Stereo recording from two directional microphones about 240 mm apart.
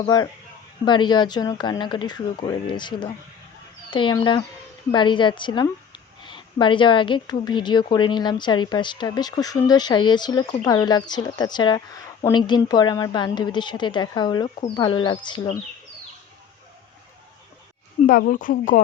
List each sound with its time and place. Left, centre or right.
0.0 s a woman's voice: centre
18.0 s speech: left